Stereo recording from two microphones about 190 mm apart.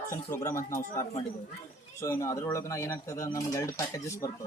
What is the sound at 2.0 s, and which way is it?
Speech, 15° left (ahead or behind).